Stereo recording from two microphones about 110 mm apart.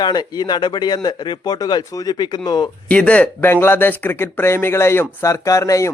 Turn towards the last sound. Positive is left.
turn(degrees=30)  # may be behind; listen again after turning